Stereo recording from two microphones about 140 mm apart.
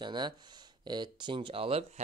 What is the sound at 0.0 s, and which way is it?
Speech, 35° right (ahead or behind).